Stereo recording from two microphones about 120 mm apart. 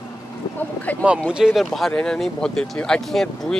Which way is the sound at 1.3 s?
5° right (ahead or behind).